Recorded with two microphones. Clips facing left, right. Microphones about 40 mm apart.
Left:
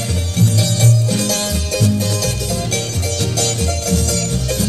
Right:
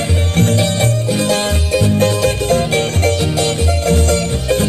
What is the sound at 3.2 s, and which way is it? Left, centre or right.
Music, right.